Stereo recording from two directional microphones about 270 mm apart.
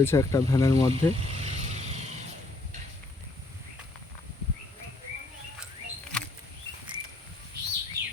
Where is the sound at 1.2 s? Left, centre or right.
Right.